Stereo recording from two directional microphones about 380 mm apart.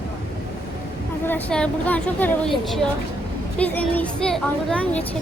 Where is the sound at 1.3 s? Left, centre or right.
Centre.